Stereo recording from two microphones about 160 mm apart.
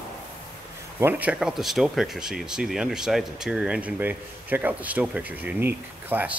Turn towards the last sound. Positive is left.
turn(degrees=-10)  # may be behind; listen again after turning